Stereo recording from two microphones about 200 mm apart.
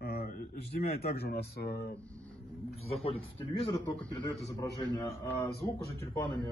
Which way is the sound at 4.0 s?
Centre (ahead or behind).